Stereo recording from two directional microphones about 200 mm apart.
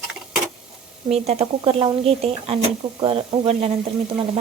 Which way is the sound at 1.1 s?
30° right (ahead or behind).